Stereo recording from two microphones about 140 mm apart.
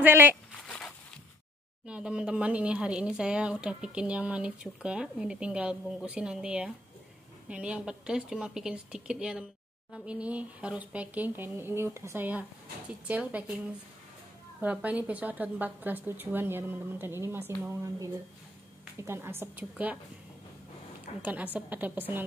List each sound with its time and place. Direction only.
0.0 s speech: 15° right (ahead or behind)
0.7 s a sound: 10° left (ahead or behind)
1.9 s a woman's voice: 5° right (ahead or behind)
14.6 s speech: 10° right (ahead or behind)
21.2 s speech: 10° right (ahead or behind)